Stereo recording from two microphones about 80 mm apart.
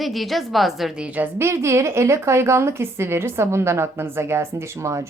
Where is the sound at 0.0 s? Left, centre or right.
Centre.